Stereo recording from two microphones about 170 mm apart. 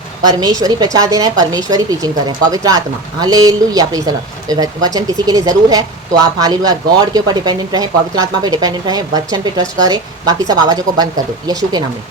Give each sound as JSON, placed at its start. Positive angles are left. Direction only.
{"t": 0.3, "sound": "speech", "side_deg": -25}